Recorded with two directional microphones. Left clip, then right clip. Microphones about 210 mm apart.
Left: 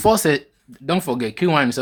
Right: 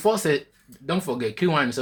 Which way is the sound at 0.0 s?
35° left (ahead or behind).